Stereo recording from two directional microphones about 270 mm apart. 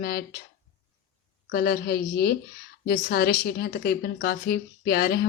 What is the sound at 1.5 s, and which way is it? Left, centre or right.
A woman's voice, left.